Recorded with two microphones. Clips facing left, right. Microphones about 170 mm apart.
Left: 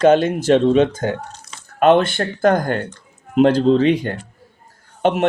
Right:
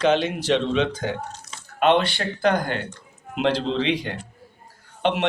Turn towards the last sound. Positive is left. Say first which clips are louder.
# left 5 dB
turn(degrees=45)  # may be behind; listen again after turning